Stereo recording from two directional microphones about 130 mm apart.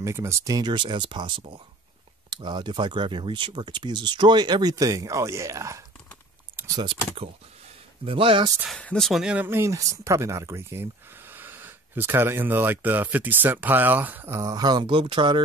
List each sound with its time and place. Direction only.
0.0 s speech: 20° right (ahead or behind)
6.7 s speech: 35° right (ahead or behind)
8.0 s speech: 45° right (ahead or behind)
8.6 s speech: 5° left (ahead or behind); by 14.4 s 15° right (ahead or behind)
14.4 s speech: 30° right (ahead or behind)